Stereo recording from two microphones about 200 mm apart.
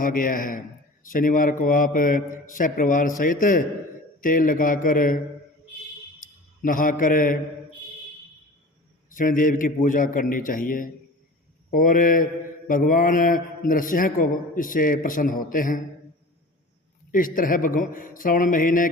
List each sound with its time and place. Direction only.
0.0 s mantra: 45° left (ahead or behind)
6.1 s a man's voice: 40° left (ahead or behind)
9.0 s mantra: 40° left (ahead or behind)
17.1 s mantra: 45° left (ahead or behind)